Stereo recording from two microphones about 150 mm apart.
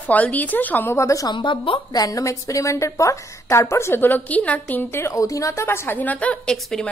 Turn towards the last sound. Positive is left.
turn(degrees=0)  # may be behind; listen again after turning